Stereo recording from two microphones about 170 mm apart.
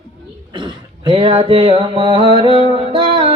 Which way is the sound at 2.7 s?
30° right (ahead or behind).